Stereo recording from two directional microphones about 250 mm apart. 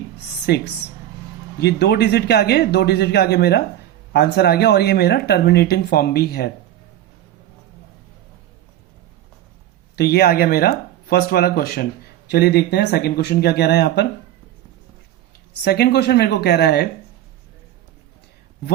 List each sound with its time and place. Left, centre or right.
0.4 s speech: left
9.9 s speech: left
15.6 s speech: left